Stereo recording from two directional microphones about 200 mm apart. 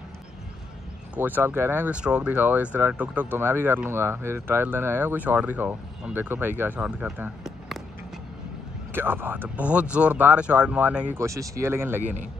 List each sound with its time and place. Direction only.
1.1 s speech: 10° right (ahead or behind)
8.9 s speech: 10° right (ahead or behind)
12.0 s a man's voice: 35° right (ahead or behind)